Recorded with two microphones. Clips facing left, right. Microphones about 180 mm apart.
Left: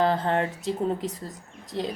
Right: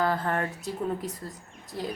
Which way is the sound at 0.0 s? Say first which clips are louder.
Left 4 dB; 25° left (ahead or behind).